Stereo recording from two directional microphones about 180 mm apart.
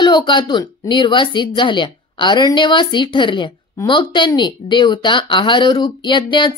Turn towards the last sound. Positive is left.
turn(degrees=25)  # may be behind; listen again after turning